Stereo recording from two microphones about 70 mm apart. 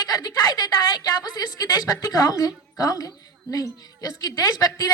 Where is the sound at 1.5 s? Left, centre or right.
Left.